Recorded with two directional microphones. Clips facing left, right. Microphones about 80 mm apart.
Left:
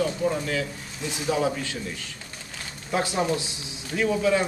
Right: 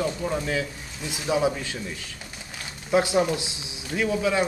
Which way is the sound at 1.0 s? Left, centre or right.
Centre.